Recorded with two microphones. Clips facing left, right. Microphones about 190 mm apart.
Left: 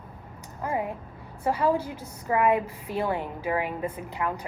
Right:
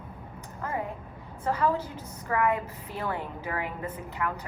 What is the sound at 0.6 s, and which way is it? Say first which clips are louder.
A woman's voice: left 4 dB; 15° left (ahead or behind).